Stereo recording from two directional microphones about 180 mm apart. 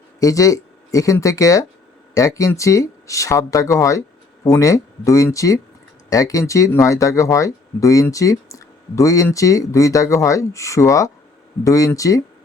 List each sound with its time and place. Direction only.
0.2 s speech: 20° left (ahead or behind)